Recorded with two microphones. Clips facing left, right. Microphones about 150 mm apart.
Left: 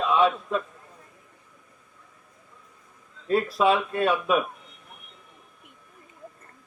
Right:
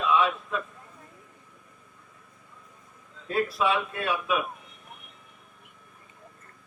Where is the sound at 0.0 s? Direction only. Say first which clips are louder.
Left 3 dB; 30° left (ahead or behind).